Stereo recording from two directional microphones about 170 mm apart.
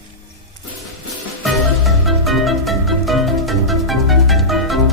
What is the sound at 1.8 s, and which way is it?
Music, centre (ahead or behind).